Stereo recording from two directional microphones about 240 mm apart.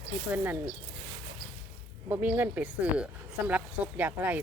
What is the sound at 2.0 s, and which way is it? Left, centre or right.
Speech, centre.